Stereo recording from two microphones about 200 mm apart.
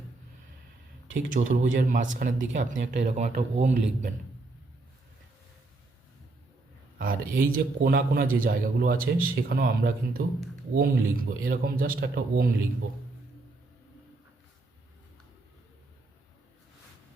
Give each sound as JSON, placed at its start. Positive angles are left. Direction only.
{"t": 1.3, "sound": "a man's voice", "side_deg": -40}
{"t": 7.0, "sound": "a man's voice", "side_deg": -45}